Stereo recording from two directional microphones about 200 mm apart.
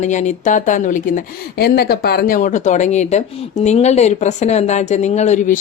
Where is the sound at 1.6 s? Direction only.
50° left (ahead or behind).